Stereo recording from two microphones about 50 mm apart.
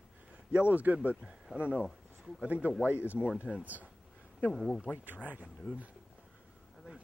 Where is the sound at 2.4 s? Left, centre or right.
Right.